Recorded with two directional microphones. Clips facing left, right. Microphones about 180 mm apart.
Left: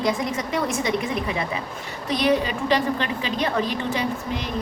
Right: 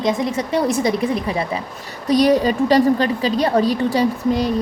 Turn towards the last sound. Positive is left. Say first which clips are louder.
# right 9 dB
turn(degrees=-35)  # may be behind; listen again after turning